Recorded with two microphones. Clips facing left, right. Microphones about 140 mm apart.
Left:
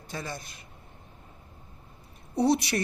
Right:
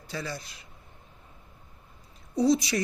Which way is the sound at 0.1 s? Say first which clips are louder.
Right 1 dB; 50° left (ahead or behind).